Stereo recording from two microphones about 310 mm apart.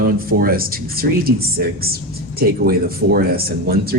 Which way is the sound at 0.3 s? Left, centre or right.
Right.